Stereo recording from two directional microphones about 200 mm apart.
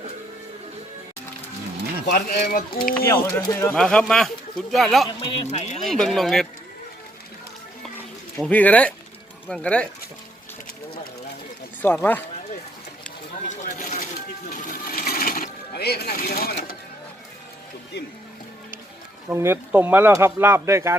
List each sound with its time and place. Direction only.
2.1 s speech: 45° left (ahead or behind)
3.1 s speech: 10° left (ahead or behind)
5.0 s speech: 30° left (ahead or behind)
5.8 s speech: centre (ahead or behind)
8.4 s speech: 5° left (ahead or behind)
11.8 s speech: 10° left (ahead or behind)
13.6 s a sound: 40° left (ahead or behind)
14.5 s sewing machine: 45° left (ahead or behind)
19.3 s speech: 10° right (ahead or behind)